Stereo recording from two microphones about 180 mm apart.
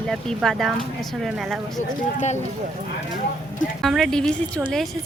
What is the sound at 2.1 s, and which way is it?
Speech, 40° left (ahead or behind).